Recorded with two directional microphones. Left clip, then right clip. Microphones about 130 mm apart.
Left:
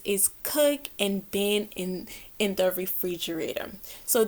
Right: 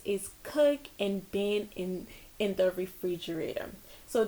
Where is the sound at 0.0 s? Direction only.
25° left (ahead or behind).